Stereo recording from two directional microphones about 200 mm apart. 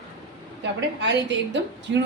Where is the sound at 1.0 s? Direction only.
60° right (ahead or behind).